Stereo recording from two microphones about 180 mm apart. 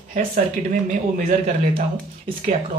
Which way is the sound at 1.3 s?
45° right (ahead or behind).